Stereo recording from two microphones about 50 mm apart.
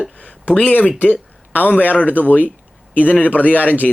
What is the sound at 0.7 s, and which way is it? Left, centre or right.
Speech, left.